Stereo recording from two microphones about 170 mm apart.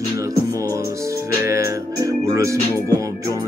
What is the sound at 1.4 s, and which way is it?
Music, 15° right (ahead or behind).